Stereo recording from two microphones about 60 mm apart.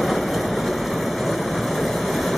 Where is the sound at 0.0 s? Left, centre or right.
Centre.